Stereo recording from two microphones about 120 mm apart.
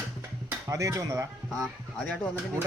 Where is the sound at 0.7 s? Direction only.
25° right (ahead or behind).